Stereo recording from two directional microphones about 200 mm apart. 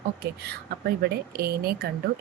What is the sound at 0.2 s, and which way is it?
Speech, 50° right (ahead or behind).